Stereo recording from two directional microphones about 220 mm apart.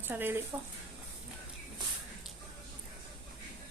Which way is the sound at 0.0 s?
10° right (ahead or behind).